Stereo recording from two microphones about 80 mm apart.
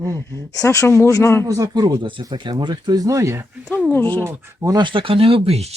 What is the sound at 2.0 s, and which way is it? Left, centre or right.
Speech, right.